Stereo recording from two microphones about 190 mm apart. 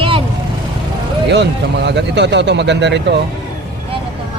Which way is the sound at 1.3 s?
65° right (ahead or behind).